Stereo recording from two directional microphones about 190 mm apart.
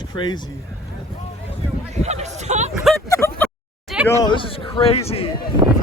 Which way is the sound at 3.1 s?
10° left (ahead or behind).